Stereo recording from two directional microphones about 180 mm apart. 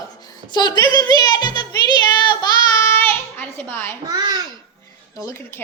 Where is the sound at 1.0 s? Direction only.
25° left (ahead or behind).